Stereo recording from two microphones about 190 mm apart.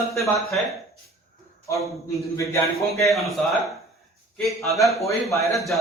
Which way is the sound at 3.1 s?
Centre (ahead or behind).